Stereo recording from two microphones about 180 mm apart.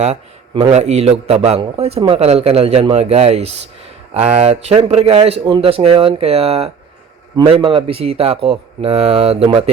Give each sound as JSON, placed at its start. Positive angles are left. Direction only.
{"t": 0.0, "sound": "a man's voice", "side_deg": -35}